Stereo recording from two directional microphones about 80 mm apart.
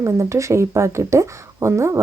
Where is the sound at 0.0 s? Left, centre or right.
Right.